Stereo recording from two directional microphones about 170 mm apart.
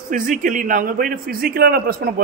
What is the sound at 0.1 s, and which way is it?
A man's voice, 50° right (ahead or behind).